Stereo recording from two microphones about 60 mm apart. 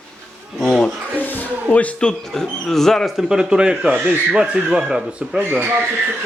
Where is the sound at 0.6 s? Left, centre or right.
Centre.